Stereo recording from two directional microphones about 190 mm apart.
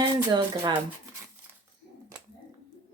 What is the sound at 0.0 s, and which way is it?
Speech, 25° right (ahead or behind).